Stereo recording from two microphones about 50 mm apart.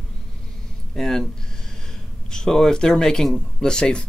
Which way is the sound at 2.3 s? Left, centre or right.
Centre.